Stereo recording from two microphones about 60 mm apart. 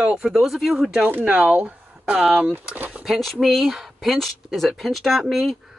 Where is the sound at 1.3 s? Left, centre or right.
Right.